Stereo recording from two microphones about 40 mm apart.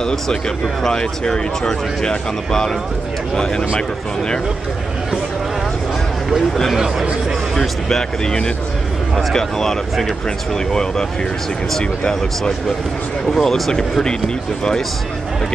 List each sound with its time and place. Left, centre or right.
0.0 s speech: centre
6.7 s a man's voice: centre
9.3 s speech: centre